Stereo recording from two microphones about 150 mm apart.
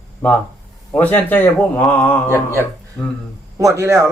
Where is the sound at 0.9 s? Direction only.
10° left (ahead or behind).